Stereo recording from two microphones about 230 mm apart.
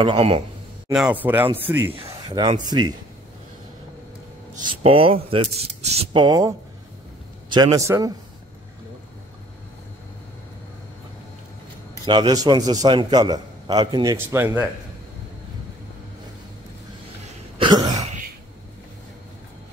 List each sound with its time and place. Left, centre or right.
0.0 s speech: right
0.9 s a man's voice: centre
4.6 s a man's voice: right
12.1 s a man's voice: centre
17.6 s throat clearing: centre